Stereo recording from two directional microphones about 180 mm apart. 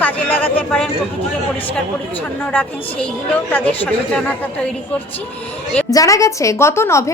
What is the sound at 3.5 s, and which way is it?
Speech, 10° left (ahead or behind).